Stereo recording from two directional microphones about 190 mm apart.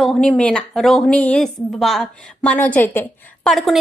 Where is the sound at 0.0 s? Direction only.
5° left (ahead or behind).